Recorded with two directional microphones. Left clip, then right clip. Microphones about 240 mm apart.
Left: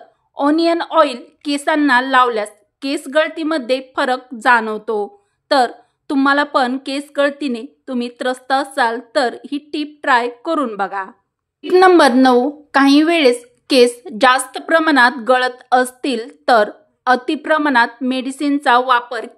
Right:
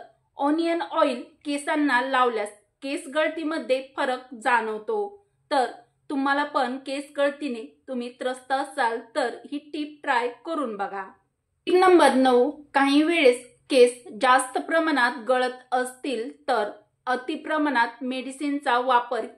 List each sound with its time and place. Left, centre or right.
0.3 s a woman's voice: left